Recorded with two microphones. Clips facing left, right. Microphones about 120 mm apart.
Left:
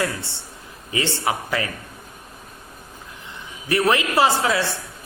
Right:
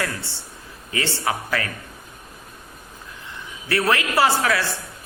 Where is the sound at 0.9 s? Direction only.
20° left (ahead or behind).